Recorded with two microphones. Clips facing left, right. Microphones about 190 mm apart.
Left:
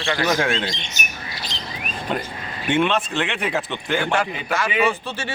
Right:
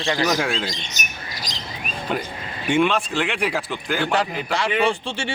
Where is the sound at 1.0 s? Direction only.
40° right (ahead or behind).